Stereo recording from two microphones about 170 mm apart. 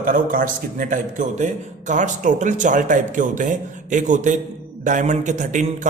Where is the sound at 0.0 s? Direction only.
55° right (ahead or behind).